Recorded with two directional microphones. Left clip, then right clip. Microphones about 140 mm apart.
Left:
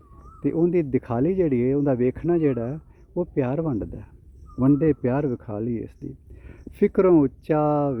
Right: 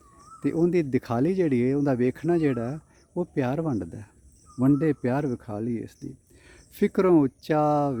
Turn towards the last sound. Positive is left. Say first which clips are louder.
# left 1 dB
turn(degrees=-25)  # may be behind; listen again after turning